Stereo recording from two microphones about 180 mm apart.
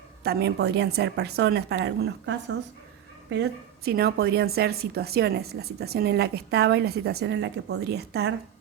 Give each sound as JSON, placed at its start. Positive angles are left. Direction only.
{"t": 0.2, "sound": "a woman's voice", "side_deg": -60}